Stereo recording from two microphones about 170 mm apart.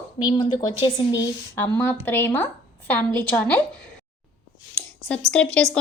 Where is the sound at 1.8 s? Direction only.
10° left (ahead or behind).